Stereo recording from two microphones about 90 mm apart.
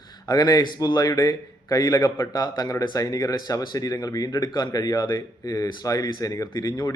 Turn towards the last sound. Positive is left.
turn(degrees=50)  # may be behind; listen again after turning